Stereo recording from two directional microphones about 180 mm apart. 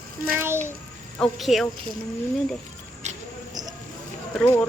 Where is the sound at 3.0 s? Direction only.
40° right (ahead or behind).